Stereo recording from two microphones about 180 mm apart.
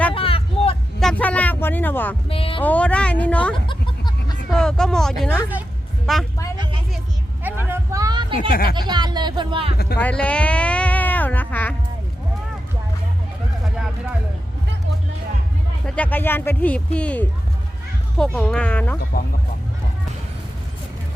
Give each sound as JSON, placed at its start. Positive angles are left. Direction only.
{"t": 0.1, "sound": "vehicle", "side_deg": 30}
{"t": 0.9, "sound": "a sound", "side_deg": 5}
{"t": 2.3, "sound": "speech", "side_deg": 30}
{"t": 2.6, "sound": "speech", "side_deg": 10}
{"t": 3.7, "sound": "music", "side_deg": 25}
{"t": 4.5, "sound": "speech", "side_deg": 5}
{"t": 7.4, "sound": "a sound", "side_deg": -10}
{"t": 8.4, "sound": "speech", "side_deg": 55}
{"t": 8.7, "sound": "speech", "side_deg": -25}
{"t": 10.0, "sound": "speech", "side_deg": 5}
{"t": 16.0, "sound": "speech", "side_deg": 10}